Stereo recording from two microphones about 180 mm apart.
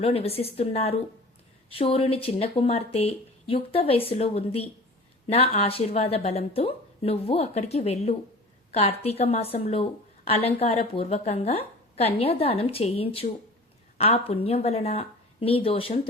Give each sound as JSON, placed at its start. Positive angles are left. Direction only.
{"t": 0.0, "sound": "speech", "side_deg": 35}